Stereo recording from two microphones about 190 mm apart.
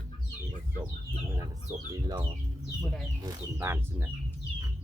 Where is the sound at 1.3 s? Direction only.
20° right (ahead or behind).